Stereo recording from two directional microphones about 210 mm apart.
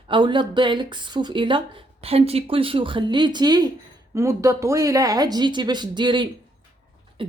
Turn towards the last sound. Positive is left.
turn(degrees=-25)  # may be behind; listen again after turning